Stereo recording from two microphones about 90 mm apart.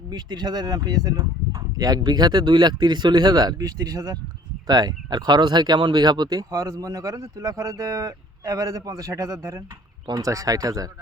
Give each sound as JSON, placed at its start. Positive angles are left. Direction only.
{"t": 0.1, "sound": "speech", "side_deg": -50}